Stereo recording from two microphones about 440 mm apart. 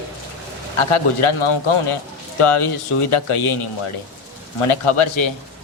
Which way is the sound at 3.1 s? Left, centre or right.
Left.